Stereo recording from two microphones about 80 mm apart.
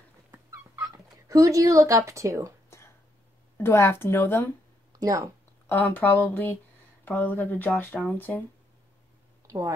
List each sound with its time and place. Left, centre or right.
0.3 s dog: right
3.5 s speech: left
5.0 s speech: right
5.7 s speech: left
9.5 s a woman's voice: right